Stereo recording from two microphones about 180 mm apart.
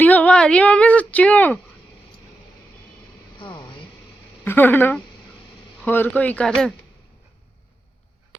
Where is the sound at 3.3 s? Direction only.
25° left (ahead or behind).